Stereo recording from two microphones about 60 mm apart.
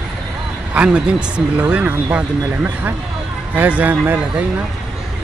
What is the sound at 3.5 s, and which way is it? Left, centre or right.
Speech, right.